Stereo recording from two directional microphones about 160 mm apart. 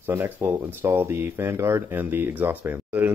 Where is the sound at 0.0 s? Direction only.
15° right (ahead or behind).